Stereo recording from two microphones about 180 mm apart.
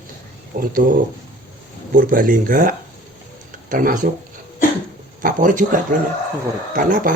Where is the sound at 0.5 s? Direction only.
45° right (ahead or behind).